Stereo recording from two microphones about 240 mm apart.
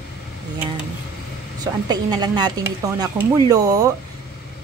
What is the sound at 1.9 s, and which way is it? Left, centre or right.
A woman's voice, centre.